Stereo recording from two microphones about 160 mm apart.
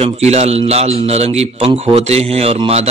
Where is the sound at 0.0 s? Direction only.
40° right (ahead or behind).